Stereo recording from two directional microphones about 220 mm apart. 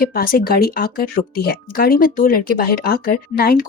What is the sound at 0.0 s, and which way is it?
Speech, 40° left (ahead or behind).